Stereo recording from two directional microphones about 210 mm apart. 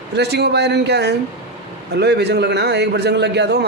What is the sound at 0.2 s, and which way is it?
A man's voice, 50° right (ahead or behind).